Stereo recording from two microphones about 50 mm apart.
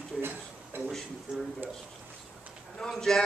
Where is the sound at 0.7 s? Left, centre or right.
Right.